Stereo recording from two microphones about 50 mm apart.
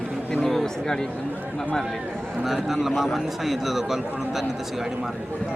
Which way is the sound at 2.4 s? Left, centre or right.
Centre.